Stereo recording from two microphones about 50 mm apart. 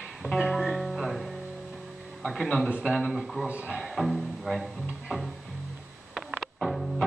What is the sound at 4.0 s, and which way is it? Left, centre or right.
Speech, centre.